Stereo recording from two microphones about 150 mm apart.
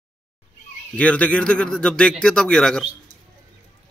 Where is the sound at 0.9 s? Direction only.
10° left (ahead or behind).